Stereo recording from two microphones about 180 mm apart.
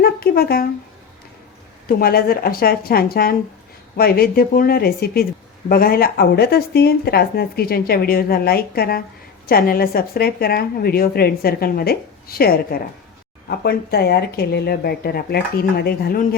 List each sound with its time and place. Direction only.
0.0 s speech: 60° left (ahead or behind)
2.0 s speech: 55° left (ahead or behind)